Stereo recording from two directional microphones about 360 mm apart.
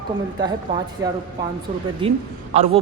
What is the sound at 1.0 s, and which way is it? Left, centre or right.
A man's voice, centre.